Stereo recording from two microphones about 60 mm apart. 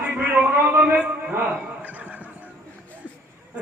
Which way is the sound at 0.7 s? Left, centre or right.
Right.